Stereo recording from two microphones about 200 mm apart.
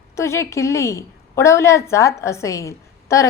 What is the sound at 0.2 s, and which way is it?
A woman's voice, 15° left (ahead or behind).